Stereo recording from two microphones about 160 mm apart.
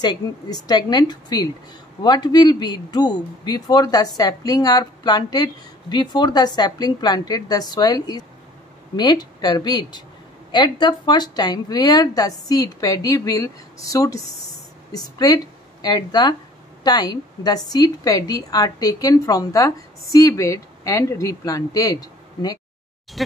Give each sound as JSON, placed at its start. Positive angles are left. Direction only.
{"t": 0.0, "sound": "a woman's voice", "side_deg": 25}
{"t": 23.2, "sound": "speech", "side_deg": 0}